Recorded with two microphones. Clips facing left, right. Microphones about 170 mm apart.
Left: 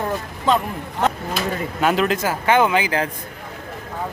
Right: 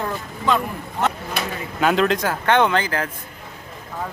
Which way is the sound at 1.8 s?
Centre (ahead or behind).